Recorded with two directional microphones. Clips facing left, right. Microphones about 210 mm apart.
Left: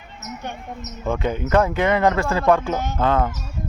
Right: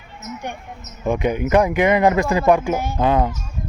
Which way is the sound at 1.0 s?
15° right (ahead or behind).